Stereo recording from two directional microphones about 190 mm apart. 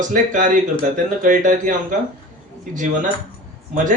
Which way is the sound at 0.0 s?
40° right (ahead or behind).